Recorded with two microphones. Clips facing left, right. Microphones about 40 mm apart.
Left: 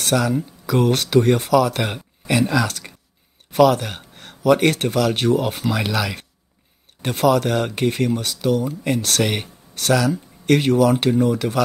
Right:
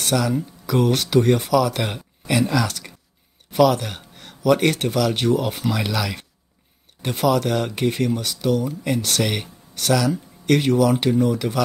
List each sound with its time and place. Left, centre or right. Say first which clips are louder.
0.0 s speech: left 2 dB; left